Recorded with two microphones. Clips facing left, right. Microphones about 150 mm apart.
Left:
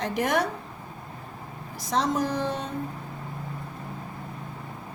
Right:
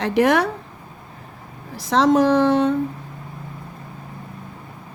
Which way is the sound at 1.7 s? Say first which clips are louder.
Right 10 dB; 75° right (ahead or behind).